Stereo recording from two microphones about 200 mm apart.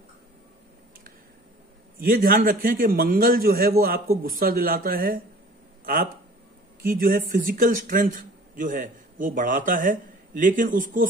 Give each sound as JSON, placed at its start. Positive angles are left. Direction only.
{"t": 2.0, "sound": "a man's voice", "side_deg": -50}
{"t": 6.8, "sound": "a man's voice", "side_deg": -45}